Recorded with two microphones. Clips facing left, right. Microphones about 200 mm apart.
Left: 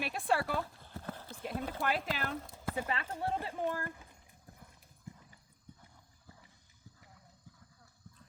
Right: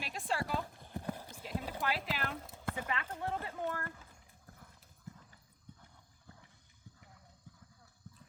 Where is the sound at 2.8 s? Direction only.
30° left (ahead or behind).